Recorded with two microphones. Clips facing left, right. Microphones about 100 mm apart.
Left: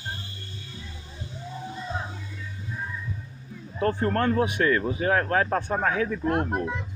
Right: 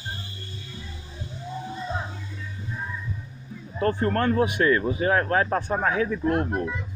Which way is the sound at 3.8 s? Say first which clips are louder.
Right 1 dB; 5° left (ahead or behind).